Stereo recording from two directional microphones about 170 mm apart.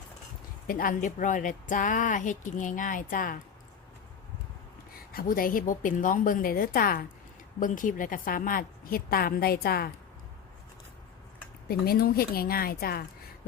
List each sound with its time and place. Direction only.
0.7 s a woman's voice: 55° left (ahead or behind)
5.1 s a woman's voice: 55° left (ahead or behind)
11.7 s a woman's voice: 65° left (ahead or behind)